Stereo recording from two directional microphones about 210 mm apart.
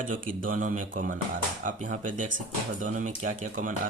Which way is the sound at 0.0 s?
40° right (ahead or behind).